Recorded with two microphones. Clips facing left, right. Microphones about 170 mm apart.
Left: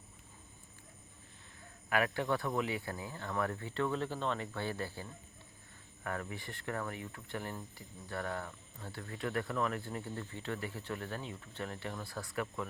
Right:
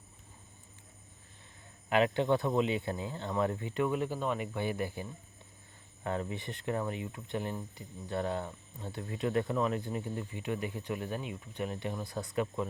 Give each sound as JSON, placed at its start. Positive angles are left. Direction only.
{"t": 1.9, "sound": "speech", "side_deg": -20}